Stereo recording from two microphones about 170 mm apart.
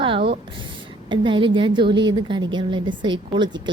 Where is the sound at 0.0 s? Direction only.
30° right (ahead or behind).